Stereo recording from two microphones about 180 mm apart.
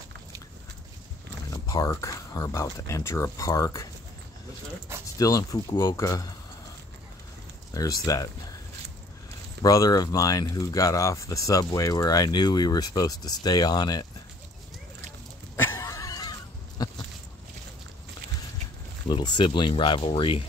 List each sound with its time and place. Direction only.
1.5 s speech: 20° left (ahead or behind)
4.9 s a sound: 15° right (ahead or behind)
5.2 s speech: 20° left (ahead or behind)
7.7 s speech: 20° left (ahead or behind)
9.6 s speech: 20° left (ahead or behind)
15.5 s pig: 15° left (ahead or behind)
19.0 s speech: 25° left (ahead or behind)